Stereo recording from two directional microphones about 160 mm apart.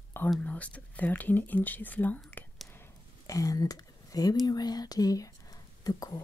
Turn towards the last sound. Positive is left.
turn(degrees=25)  # may be behind; listen again after turning